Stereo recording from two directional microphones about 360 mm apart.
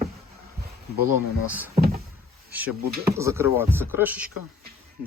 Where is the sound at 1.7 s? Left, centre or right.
Right.